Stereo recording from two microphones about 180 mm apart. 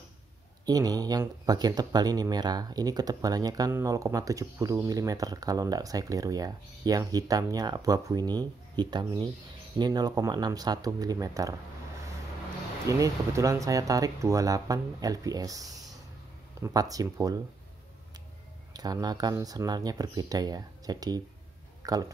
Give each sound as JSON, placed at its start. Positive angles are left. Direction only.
{"t": 0.7, "sound": "speech", "side_deg": -20}
{"t": 12.8, "sound": "speech", "side_deg": -15}
{"t": 18.7, "sound": "speech", "side_deg": -20}